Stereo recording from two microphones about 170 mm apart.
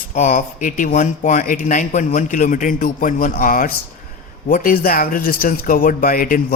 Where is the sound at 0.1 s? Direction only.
45° left (ahead or behind).